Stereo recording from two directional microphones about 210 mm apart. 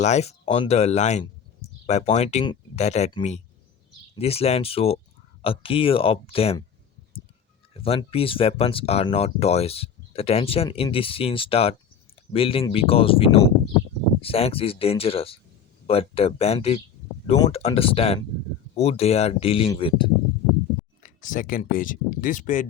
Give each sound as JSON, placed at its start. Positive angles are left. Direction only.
{"t": 0.0, "sound": "speech", "side_deg": 30}
{"t": 7.7, "sound": "speech", "side_deg": 25}
{"t": 21.0, "sound": "a sound", "side_deg": 35}
{"t": 21.7, "sound": "speech", "side_deg": 40}